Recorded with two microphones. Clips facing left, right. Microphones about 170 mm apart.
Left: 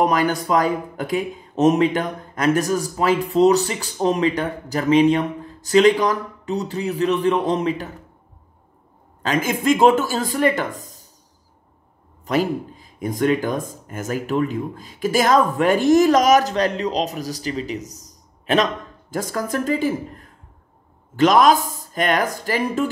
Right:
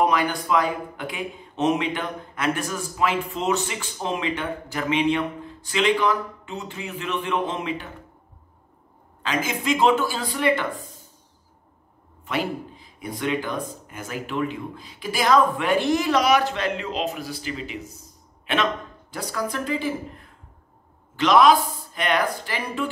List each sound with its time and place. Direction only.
0.0 s speech: 40° left (ahead or behind)
9.2 s speech: 50° left (ahead or behind)
12.3 s speech: 40° left (ahead or behind)